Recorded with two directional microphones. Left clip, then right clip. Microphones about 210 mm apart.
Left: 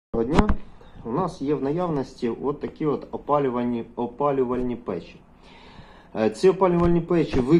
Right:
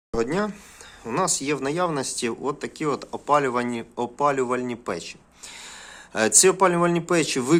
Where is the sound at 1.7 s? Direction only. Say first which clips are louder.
Right 2 dB; 30° right (ahead or behind).